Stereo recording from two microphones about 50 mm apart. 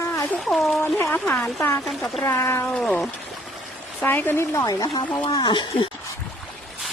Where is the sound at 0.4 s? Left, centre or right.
Centre.